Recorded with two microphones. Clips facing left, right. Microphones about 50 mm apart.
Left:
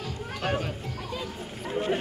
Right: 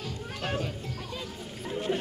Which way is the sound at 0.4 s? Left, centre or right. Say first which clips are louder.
Left 3 dB; left.